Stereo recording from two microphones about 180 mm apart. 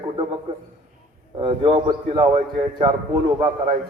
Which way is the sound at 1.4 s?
30° right (ahead or behind).